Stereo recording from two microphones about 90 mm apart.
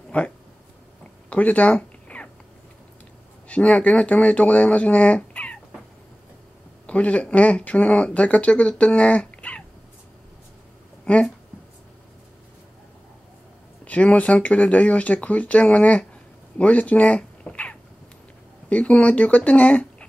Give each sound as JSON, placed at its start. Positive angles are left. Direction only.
{"t": 0.1, "sound": "speech", "side_deg": 15}
{"t": 1.3, "sound": "cat", "side_deg": 15}
{"t": 3.4, "sound": "speech", "side_deg": 15}
{"t": 6.9, "sound": "speech", "side_deg": 15}
{"t": 11.1, "sound": "speech", "side_deg": 10}
{"t": 13.8, "sound": "speech", "side_deg": 15}
{"t": 16.5, "sound": "cat", "side_deg": 15}
{"t": 18.7, "sound": "speech", "side_deg": 15}